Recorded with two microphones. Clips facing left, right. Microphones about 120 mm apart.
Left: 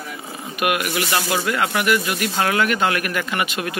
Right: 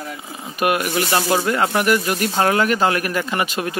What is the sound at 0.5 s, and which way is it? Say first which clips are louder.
Speech: right 2 dB; 35° right (ahead or behind).